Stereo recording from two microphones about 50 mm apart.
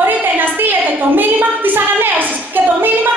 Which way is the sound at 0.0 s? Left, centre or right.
Right.